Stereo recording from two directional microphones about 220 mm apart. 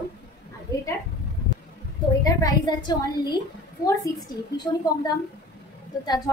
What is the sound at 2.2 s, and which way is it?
A woman's voice, 15° left (ahead or behind).